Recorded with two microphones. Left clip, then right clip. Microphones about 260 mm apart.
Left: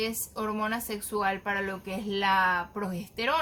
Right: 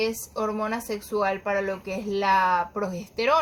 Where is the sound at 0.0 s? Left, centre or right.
Centre.